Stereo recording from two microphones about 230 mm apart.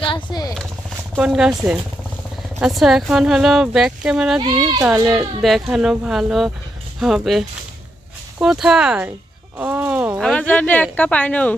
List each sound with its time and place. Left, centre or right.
0.0 s vehicle: left
1.1 s speech: centre
9.6 s a sound: centre
10.9 s a woman's voice: centre